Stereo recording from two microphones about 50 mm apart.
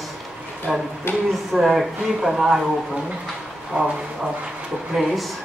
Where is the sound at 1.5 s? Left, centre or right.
Centre.